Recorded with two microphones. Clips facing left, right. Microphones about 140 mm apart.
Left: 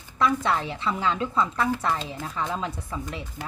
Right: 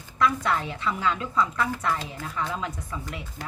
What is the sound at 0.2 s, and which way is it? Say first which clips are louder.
A woman's voice: left 1 dB; 25° left (ahead or behind).